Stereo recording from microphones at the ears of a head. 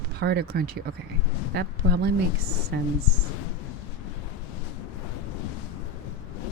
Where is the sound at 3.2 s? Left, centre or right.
Left.